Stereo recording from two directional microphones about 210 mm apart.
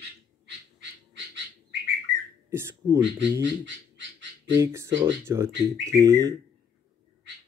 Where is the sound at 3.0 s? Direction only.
55° right (ahead or behind).